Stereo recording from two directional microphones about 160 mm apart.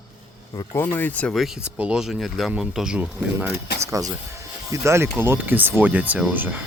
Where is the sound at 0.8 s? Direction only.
15° left (ahead or behind); by 3.5 s 10° right (ahead or behind).